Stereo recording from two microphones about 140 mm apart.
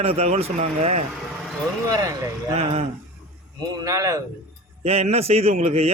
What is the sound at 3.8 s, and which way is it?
Speech, 25° right (ahead or behind).